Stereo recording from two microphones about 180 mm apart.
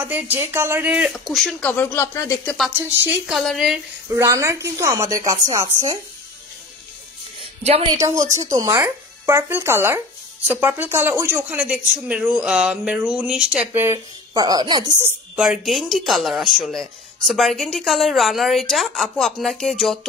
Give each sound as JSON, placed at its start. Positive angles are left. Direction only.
{"t": 0.0, "sound": "a woman's voice", "side_deg": -10}
{"t": 3.1, "sound": "a woman's voice", "side_deg": 0}
{"t": 4.1, "sound": "speech", "side_deg": -15}
{"t": 7.6, "sound": "speech", "side_deg": -35}
{"t": 7.9, "sound": "a woman's voice", "side_deg": -20}
{"t": 13.9, "sound": "speech", "side_deg": -20}
{"t": 15.0, "sound": "a woman's voice", "side_deg": -10}